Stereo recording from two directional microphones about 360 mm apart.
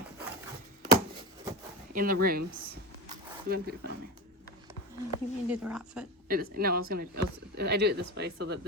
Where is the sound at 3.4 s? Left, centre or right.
Right.